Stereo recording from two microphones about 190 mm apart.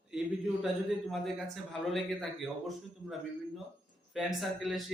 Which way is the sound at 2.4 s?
Centre (ahead or behind).